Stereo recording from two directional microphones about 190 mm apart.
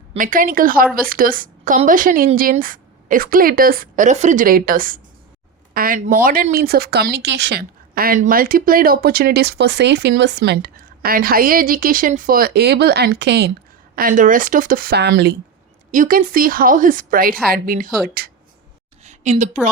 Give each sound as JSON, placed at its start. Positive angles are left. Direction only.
{"t": 0.2, "sound": "a woman's voice", "side_deg": -45}
{"t": 13.9, "sound": "a woman's voice", "side_deg": -45}
{"t": 15.9, "sound": "a woman's voice", "side_deg": -45}
{"t": 19.0, "sound": "a sound", "side_deg": -40}